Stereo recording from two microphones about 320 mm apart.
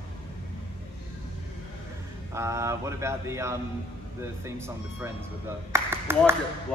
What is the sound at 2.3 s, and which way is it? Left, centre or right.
Speech, centre.